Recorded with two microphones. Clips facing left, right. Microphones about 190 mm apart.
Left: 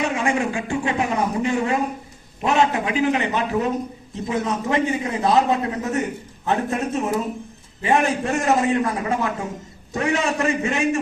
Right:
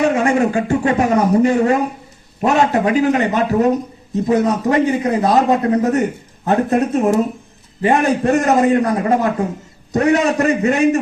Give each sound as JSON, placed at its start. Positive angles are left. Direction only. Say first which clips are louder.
{"t": 0.0, "sound": "a man's voice", "louder": "right 7 dB", "side_deg": -40}